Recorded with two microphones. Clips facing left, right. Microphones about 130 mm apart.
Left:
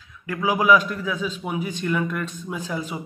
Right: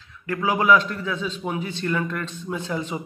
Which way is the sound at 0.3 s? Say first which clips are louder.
Even; 10° left (ahead or behind).